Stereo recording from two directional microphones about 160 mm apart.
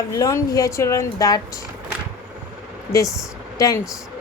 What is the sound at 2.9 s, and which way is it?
Speech, 20° left (ahead or behind).